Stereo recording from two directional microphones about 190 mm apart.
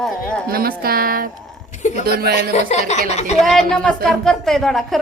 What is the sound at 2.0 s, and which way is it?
Speech, 55° right (ahead or behind).